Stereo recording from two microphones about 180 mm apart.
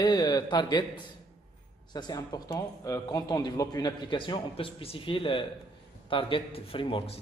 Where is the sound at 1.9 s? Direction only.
25° left (ahead or behind).